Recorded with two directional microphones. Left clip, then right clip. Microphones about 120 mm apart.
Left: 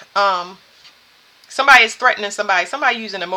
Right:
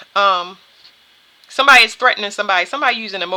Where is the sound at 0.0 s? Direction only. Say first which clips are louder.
Right 2 dB; 45° right (ahead or behind).